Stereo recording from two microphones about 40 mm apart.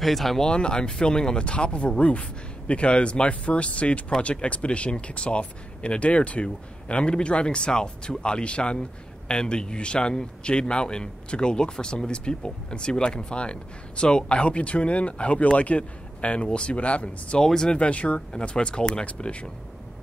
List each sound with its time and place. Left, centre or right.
0.0 s speech: centre
0.4 s a man's voice: left
17.4 s speech: centre
17.7 s a man's voice: left